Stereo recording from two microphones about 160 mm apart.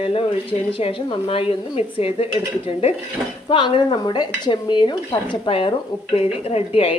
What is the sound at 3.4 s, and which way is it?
Stir, 30° left (ahead or behind).